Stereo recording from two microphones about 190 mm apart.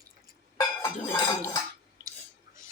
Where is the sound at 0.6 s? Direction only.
15° left (ahead or behind).